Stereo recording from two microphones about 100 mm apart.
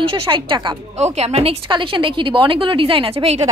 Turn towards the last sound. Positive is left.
turn(degrees=-75)  # may be behind; listen again after turning